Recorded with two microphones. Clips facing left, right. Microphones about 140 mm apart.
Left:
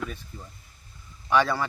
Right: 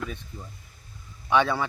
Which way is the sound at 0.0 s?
Centre (ahead or behind).